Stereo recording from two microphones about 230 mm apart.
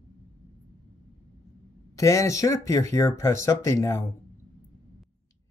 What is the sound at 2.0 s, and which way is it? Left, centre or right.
Speech, centre.